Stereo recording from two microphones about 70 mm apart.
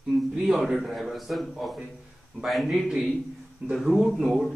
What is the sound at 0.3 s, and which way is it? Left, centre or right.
A man's voice, centre.